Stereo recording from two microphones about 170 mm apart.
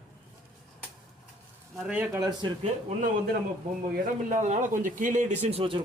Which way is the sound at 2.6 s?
45° right (ahead or behind).